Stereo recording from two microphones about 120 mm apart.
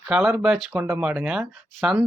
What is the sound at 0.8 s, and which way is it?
Speech, 20° right (ahead or behind).